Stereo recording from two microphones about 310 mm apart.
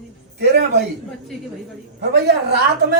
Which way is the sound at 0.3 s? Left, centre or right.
Right.